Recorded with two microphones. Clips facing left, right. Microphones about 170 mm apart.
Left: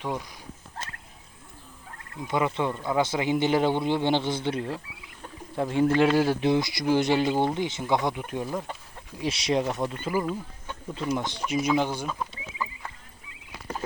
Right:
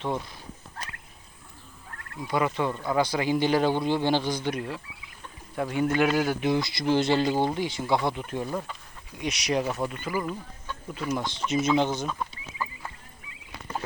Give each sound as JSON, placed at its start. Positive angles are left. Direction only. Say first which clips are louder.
{"t": 0.0, "sound": "speech", "louder": "right 2 dB", "side_deg": 10}
{"t": 2.2, "sound": "a man's voice", "louder": "even", "side_deg": 20}
{"t": 6.6, "sound": "speech", "louder": "left 1 dB", "side_deg": 15}
{"t": 9.1, "sound": "a man's voice", "louder": "left 2 dB", "side_deg": 30}
{"t": 9.6, "sound": "speech", "louder": "left 1 dB", "side_deg": -5}
{"t": 10.2, "sound": "speech", "louder": "left 2 dB", "side_deg": 25}
{"t": 11.1, "sound": "speech", "louder": "even", "side_deg": 15}